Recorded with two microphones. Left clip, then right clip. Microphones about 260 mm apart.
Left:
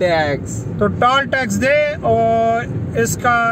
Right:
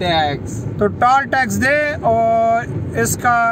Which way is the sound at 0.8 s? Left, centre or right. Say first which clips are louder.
Right 1 dB; centre.